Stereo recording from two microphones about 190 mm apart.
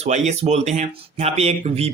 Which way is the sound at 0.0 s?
35° right (ahead or behind).